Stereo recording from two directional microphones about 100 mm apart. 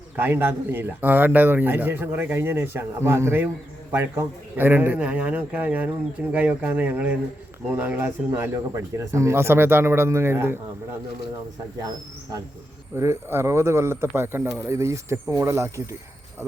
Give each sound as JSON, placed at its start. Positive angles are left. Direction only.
{"t": 0.2, "sound": "a man's voice", "side_deg": -20}
{"t": 13.0, "sound": "speech", "side_deg": -25}